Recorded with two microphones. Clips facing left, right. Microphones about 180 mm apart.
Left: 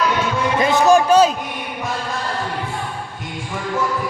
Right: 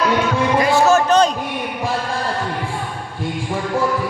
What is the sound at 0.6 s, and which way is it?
Music, 20° left (ahead or behind).